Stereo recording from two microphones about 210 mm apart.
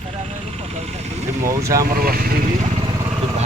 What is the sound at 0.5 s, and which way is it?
Speech, 30° right (ahead or behind).